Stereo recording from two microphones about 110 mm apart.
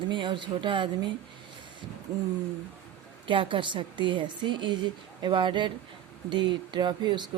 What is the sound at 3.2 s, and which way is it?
Speech, 50° right (ahead or behind).